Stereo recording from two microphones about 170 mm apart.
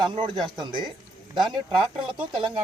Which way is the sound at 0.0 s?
25° right (ahead or behind).